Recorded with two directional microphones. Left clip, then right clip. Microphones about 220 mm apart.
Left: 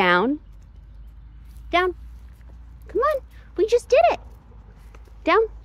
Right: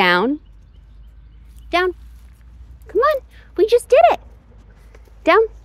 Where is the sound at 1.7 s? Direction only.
25° right (ahead or behind).